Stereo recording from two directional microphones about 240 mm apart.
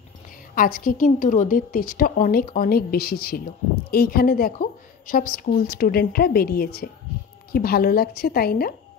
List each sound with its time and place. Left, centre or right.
0.6 s a woman's voice: left